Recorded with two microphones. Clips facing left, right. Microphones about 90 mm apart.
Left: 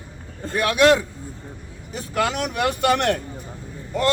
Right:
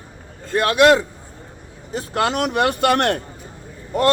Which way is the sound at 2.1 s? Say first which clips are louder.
Right 3 dB; 50° right (ahead or behind).